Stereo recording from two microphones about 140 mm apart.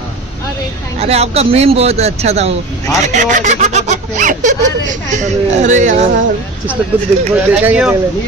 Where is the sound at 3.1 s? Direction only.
60° right (ahead or behind).